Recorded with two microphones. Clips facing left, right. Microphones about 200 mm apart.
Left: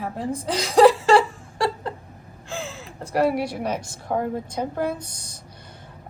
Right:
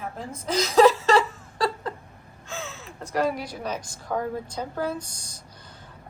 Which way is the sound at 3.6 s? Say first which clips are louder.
Left 4 dB; 30° left (ahead or behind).